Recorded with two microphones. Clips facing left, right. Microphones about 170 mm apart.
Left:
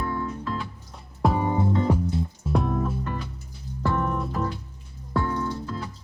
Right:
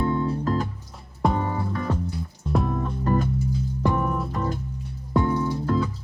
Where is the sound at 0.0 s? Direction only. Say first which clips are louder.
Right 6 dB; 25° right (ahead or behind).